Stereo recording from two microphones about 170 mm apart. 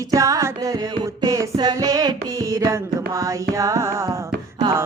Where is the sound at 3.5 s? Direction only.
20° right (ahead or behind).